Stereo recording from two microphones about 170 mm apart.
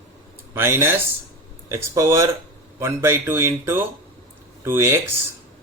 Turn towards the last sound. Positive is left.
turn(degrees=-15)  # may be behind; listen again after turning